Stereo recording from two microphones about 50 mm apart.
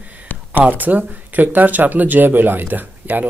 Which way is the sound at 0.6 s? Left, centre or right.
Right.